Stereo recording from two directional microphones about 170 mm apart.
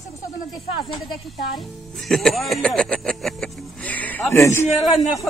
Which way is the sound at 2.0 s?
Centre (ahead or behind).